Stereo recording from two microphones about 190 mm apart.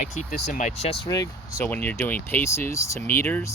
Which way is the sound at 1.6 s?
10° left (ahead or behind).